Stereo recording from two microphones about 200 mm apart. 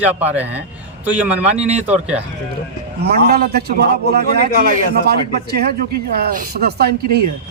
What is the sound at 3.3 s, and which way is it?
A man's voice, 50° right (ahead or behind).